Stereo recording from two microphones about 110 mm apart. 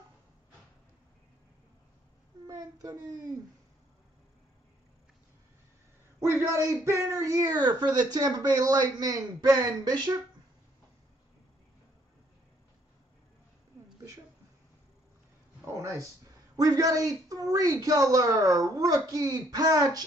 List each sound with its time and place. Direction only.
2.4 s a child's voice: 30° right (ahead or behind)
6.5 s speech: 25° right (ahead or behind)
15.6 s speech: 25° right (ahead or behind)